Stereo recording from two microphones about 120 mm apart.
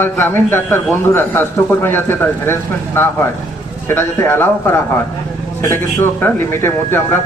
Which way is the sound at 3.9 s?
20° left (ahead or behind).